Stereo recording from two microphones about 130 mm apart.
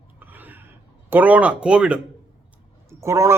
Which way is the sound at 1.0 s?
15° right (ahead or behind).